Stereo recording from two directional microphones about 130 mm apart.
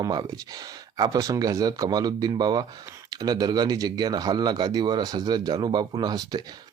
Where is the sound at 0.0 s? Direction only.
30° right (ahead or behind).